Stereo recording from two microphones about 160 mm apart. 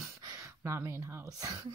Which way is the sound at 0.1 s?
20° right (ahead or behind).